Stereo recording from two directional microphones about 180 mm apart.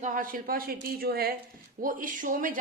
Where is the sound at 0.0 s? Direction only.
50° right (ahead or behind).